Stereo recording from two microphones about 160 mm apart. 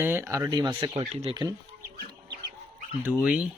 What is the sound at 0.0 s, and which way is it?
Speech, 15° right (ahead or behind).